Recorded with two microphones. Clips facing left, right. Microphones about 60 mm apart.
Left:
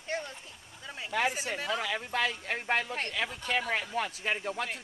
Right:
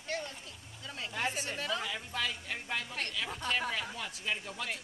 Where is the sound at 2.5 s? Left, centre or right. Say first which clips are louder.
Left 7 dB; left.